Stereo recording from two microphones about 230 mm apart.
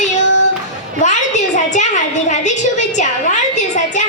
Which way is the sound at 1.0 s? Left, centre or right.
Left.